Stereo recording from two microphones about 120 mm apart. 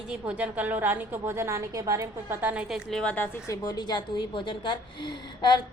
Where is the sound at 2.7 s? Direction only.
5° left (ahead or behind).